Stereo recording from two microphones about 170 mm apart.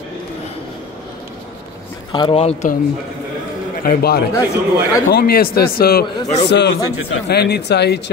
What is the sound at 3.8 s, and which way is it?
A man's voice, 65° left (ahead or behind).